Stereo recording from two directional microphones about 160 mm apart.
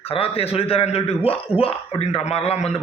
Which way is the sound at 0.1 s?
35° left (ahead or behind).